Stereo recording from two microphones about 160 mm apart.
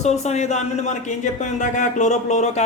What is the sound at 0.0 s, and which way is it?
Speech, 45° left (ahead or behind).